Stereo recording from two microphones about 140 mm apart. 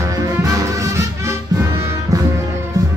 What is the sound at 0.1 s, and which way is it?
Music, 25° right (ahead or behind).